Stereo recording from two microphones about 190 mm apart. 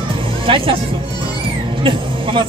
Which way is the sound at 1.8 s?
25° right (ahead or behind).